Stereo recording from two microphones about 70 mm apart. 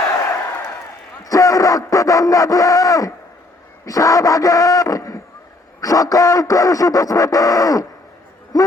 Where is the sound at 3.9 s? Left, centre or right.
Left.